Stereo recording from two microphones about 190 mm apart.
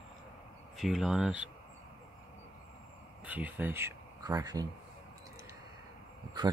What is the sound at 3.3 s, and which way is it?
Speech, 10° right (ahead or behind).